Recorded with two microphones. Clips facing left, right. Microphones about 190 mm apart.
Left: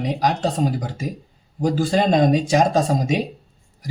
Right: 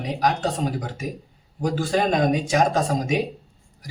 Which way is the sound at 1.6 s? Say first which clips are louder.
Left 3 dB; 30° left (ahead or behind).